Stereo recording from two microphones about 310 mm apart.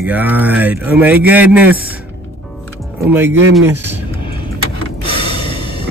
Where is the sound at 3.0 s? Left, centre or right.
Centre.